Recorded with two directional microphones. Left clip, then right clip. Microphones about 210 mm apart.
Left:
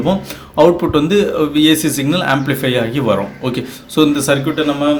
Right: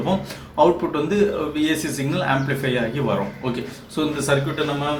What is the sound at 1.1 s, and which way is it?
Speech, 45° left (ahead or behind).